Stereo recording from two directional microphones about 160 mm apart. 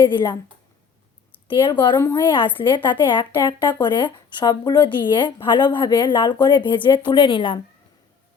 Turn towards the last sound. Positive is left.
turn(degrees=30)  # may be behind; listen again after turning